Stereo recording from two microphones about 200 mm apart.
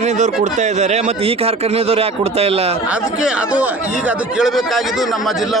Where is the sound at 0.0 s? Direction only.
35° right (ahead or behind).